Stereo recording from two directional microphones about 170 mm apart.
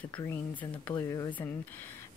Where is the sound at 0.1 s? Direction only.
15° left (ahead or behind).